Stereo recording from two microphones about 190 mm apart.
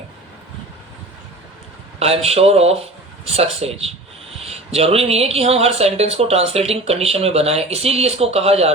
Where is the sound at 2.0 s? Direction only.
30° right (ahead or behind).